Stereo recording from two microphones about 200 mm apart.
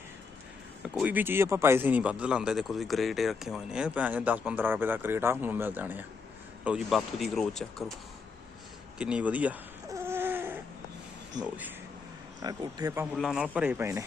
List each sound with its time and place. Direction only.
0.8 s a man's voice: 5° right (ahead or behind)
9.0 s a sound: 5° right (ahead or behind)
11.4 s a man's voice: 5° right (ahead or behind)
12.4 s a man's voice: 20° right (ahead or behind)
13.1 s a man's voice: 5° right (ahead or behind)